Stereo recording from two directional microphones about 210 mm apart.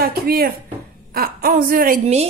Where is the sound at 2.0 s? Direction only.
30° right (ahead or behind).